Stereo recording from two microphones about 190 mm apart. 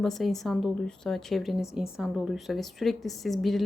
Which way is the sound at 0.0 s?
Centre (ahead or behind).